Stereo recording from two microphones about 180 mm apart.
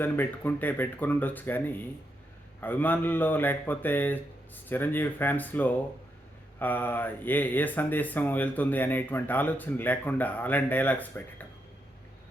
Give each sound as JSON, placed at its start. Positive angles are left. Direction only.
{"t": 0.0, "sound": "speech", "side_deg": 10}